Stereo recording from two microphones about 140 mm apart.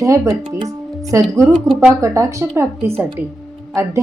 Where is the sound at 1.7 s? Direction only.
5° right (ahead or behind).